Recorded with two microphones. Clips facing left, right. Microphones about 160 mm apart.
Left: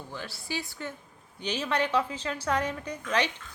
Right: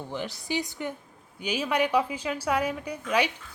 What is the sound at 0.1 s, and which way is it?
A woman's voice, 20° right (ahead or behind).